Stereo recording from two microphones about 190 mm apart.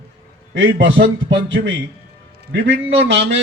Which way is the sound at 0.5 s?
70° right (ahead or behind).